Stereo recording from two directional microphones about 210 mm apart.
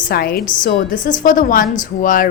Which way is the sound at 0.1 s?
45° left (ahead or behind).